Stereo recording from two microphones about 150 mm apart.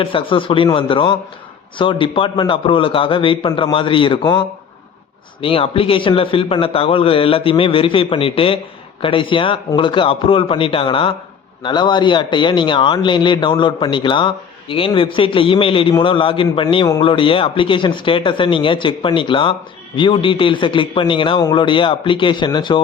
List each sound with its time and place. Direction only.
0.0 s speech: 35° left (ahead or behind)